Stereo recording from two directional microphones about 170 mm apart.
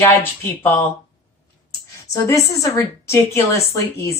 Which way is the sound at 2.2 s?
20° left (ahead or behind).